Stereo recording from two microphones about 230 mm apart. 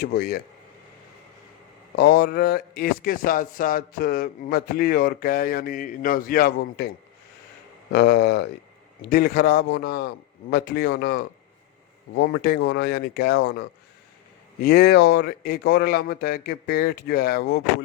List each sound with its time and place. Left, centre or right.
0.0 s speech: left
2.0 s speech: left
7.9 s speech: left